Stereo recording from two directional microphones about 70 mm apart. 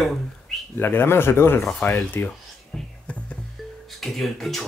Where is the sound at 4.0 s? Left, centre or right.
Centre.